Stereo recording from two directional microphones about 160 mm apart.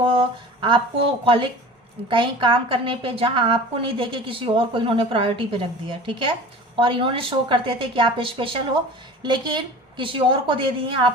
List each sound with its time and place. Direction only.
0.0 s a woman's voice: 35° right (ahead or behind)